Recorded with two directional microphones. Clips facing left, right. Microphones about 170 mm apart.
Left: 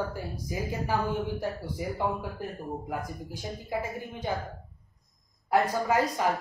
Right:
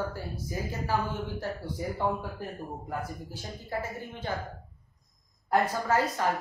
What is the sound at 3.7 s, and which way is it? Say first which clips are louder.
Speech: left 1 dB; 15° left (ahead or behind).